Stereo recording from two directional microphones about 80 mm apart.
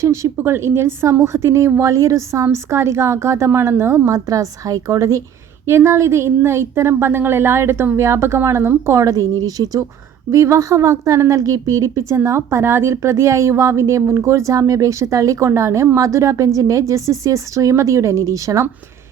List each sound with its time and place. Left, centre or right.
0.0 s a woman's voice: right
5.6 s a woman's voice: right
8.9 s speech: right
10.3 s a woman's voice: right